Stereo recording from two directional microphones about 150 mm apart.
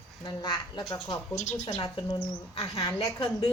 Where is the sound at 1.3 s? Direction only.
55° left (ahead or behind).